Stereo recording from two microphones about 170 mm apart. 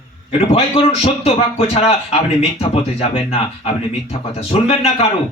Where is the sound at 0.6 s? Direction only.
35° left (ahead or behind).